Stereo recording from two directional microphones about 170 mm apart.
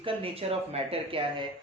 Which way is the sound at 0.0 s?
35° right (ahead or behind).